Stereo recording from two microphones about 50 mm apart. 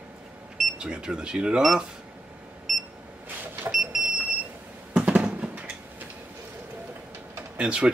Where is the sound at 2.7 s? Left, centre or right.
Centre.